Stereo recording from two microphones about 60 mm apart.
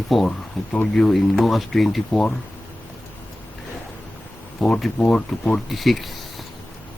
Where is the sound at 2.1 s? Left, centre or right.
Centre.